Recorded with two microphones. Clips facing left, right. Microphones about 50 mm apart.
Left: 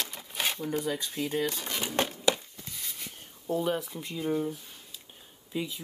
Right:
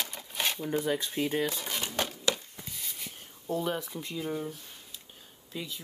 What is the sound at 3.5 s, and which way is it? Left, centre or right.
Speech, centre.